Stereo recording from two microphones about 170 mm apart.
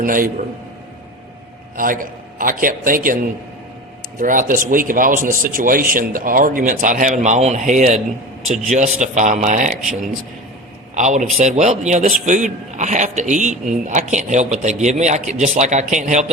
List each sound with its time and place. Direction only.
0.0 s a man's voice: 55° right (ahead or behind)
1.7 s a man's voice: 55° right (ahead or behind)
10.9 s a man's voice: 45° right (ahead or behind)